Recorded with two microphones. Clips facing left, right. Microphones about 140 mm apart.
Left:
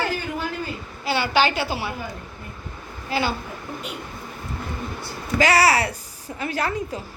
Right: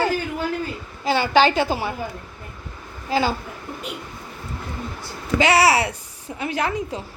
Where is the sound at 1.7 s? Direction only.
45° right (ahead or behind).